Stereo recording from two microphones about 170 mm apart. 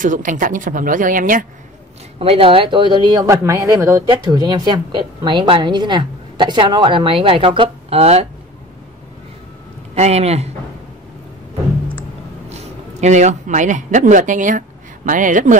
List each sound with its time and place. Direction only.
0.0 s speech: 50° right (ahead or behind)
2.1 s a woman's voice: 35° right (ahead or behind)
9.9 s speech: 40° right (ahead or behind)
12.4 s speech: 40° right (ahead or behind)